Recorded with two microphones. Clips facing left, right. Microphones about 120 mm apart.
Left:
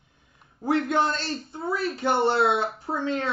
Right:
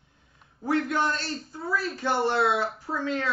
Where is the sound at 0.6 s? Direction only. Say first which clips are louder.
Left 2 dB; 25° left (ahead or behind).